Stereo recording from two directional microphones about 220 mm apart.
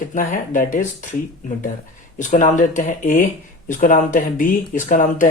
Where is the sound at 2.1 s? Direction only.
35° left (ahead or behind).